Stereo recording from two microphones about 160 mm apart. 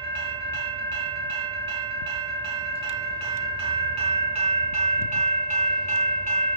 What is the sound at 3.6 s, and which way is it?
Train, 35° right (ahead or behind).